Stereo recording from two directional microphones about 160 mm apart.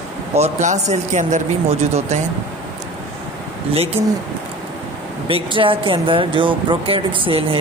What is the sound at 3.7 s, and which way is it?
Speech, 40° right (ahead or behind).